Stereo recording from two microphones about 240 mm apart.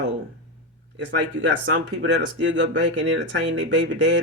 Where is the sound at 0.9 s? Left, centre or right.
Right.